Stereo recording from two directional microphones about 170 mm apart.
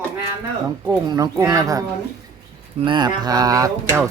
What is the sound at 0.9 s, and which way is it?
Speech, 20° right (ahead or behind).